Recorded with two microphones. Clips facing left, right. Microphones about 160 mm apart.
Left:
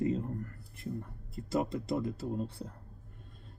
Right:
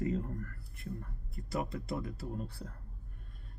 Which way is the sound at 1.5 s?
25° left (ahead or behind).